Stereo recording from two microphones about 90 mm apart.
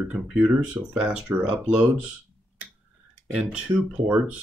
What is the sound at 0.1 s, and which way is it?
Speech, 10° right (ahead or behind).